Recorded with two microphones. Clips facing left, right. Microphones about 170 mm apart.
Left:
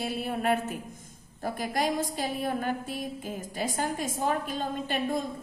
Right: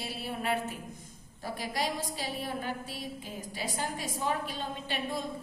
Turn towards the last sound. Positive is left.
turn(degrees=50)  # may be behind; listen again after turning